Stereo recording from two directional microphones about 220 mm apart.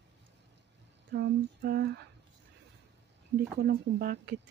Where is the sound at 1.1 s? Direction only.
50° right (ahead or behind).